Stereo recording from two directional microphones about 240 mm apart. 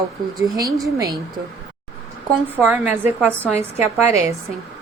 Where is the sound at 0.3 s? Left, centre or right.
Centre.